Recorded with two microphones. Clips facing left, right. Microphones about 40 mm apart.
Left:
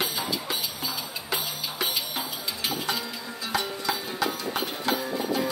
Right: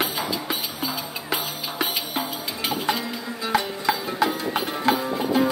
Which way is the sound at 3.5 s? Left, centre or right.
Right.